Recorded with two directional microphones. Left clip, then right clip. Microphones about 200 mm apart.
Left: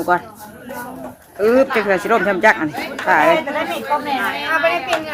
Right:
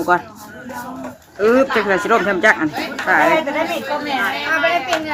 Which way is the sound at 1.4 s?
5° left (ahead or behind).